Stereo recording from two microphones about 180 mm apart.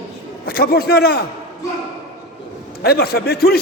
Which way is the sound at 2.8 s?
60° left (ahead or behind).